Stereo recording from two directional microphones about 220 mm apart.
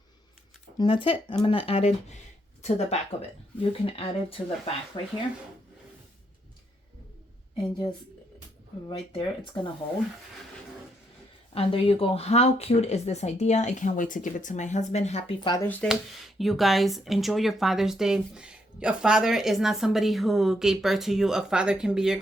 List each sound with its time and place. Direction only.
0.8 s speech: 25° left (ahead or behind)
8.9 s speech: 20° left (ahead or behind)
11.5 s speech: 25° left (ahead or behind)
15.6 s speech: 5° left (ahead or behind)